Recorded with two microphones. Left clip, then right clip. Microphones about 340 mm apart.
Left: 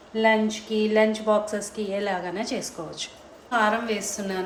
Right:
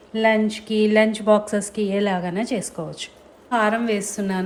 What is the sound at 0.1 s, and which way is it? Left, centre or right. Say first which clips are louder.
A woman's voice: right 2 dB; right.